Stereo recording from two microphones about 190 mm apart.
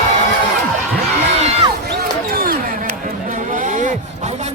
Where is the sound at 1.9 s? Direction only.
55° right (ahead or behind).